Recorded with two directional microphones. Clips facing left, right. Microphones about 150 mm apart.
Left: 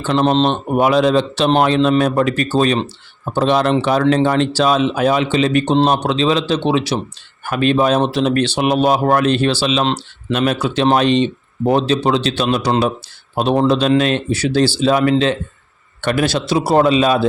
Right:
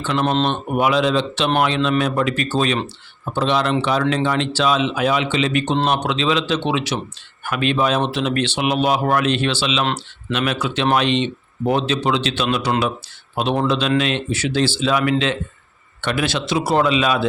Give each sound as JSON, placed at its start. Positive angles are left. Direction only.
{"t": 0.0, "sound": "speech", "side_deg": 40}